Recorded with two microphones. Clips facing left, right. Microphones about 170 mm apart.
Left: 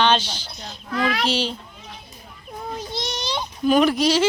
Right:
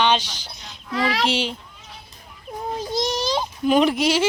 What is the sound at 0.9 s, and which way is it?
Speech, 25° right (ahead or behind).